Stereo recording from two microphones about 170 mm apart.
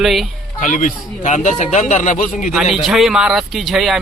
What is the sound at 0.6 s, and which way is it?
Speech, 50° left (ahead or behind).